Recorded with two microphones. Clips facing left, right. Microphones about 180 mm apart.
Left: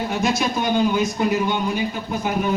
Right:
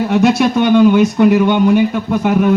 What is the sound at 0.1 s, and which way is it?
Speech, 70° right (ahead or behind).